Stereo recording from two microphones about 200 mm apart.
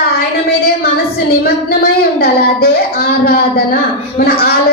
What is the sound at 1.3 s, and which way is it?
A woman's voice, 50° left (ahead or behind).